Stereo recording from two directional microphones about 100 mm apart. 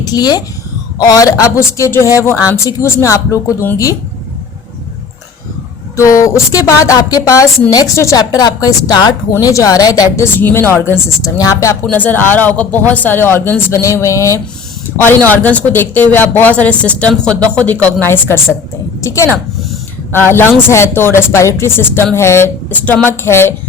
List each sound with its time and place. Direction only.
0.1 s speech: 40° left (ahead or behind)
6.0 s speech: 30° left (ahead or behind)
10.3 s speech: 20° left (ahead or behind)
11.9 s speech: 15° left (ahead or behind)
15.3 s a woman's voice: 15° left (ahead or behind)